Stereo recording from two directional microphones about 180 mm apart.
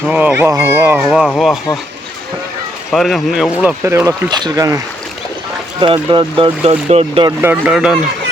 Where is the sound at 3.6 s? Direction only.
10° right (ahead or behind); by 7.3 s 35° right (ahead or behind).